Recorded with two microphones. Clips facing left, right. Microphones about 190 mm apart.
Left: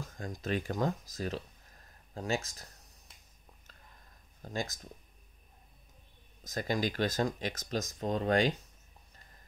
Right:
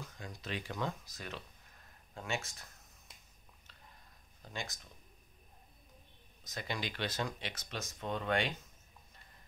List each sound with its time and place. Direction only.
0.0 s speech: 45° left (ahead or behind)
4.4 s speech: 40° left (ahead or behind)
6.4 s speech: 45° left (ahead or behind)